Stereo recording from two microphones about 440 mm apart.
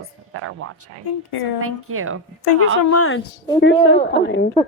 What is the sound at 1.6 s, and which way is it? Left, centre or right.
Speech, right.